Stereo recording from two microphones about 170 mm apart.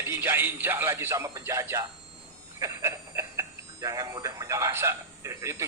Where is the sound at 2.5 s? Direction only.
15° right (ahead or behind).